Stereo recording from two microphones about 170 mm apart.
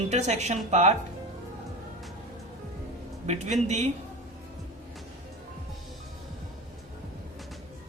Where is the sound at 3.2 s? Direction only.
40° right (ahead or behind).